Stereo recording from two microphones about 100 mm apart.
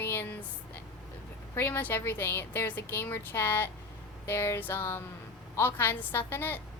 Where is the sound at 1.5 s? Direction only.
20° left (ahead or behind).